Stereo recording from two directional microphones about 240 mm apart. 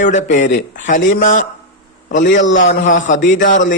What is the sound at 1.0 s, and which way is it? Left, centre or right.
Speech, left.